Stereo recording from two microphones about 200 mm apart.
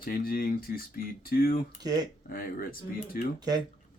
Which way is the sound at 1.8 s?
20° right (ahead or behind).